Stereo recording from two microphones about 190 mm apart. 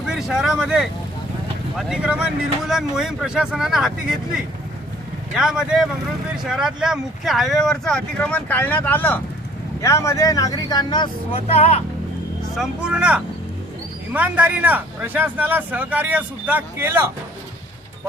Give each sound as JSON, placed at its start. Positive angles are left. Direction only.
{"t": 0.0, "sound": "speech", "side_deg": 0}
{"t": 12.5, "sound": "speech", "side_deg": -5}